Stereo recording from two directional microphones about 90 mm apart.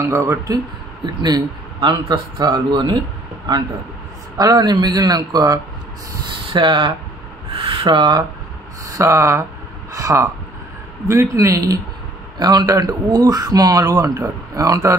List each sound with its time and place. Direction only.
0.0 s a man's voice: 35° right (ahead or behind)
1.0 s a man's voice: 50° right (ahead or behind)
6.5 s a man's voice: 60° right (ahead or behind)
7.4 s speech: 85° right; by 8.2 s 60° right (ahead or behind)
8.8 s a man's voice: 35° right (ahead or behind)
12.4 s speech: 50° right (ahead or behind)